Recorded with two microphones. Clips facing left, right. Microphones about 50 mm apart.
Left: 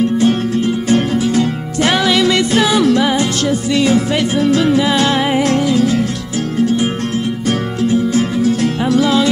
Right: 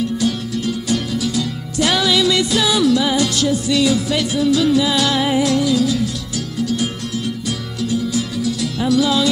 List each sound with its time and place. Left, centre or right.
0.2 s music: left